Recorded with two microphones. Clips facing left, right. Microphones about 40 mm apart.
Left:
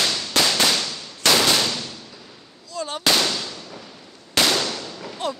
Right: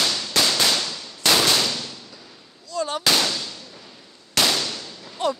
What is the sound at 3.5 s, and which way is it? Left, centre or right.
Fireworks, left.